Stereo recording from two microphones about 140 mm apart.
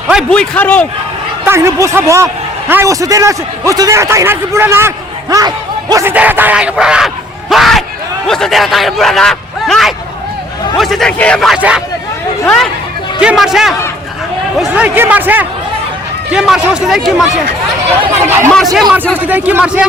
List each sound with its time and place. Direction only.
0.3 s a man's voice: 10° left (ahead or behind)
1.5 s a man's voice: 20° right (ahead or behind)
6.1 s speech: 10° right (ahead or behind)
7.5 s bellow: centre (ahead or behind)
8.3 s speech: centre (ahead or behind)
13.1 s speech: 5° right (ahead or behind)
14.7 s speech: 15° right (ahead or behind)
18.3 s a man's voice: 20° right (ahead or behind)
18.5 s speech: centre (ahead or behind)
19.1 s speech: 10° right (ahead or behind)